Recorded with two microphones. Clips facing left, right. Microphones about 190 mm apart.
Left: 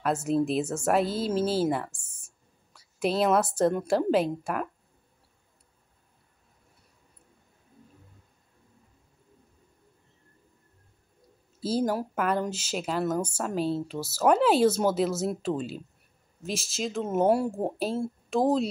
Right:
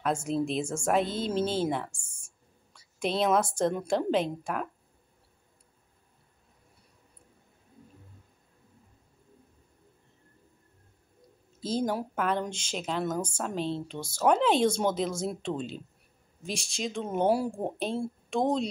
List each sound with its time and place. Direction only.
0.0 s speech: 5° left (ahead or behind)
2.0 s a sound: 30° right (ahead or behind)
2.7 s speech: 5° left (ahead or behind)
11.6 s speech: 5° left (ahead or behind)